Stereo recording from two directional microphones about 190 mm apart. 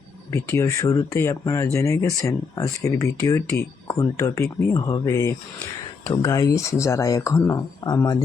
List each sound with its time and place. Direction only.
0.3 s speech: 15° left (ahead or behind)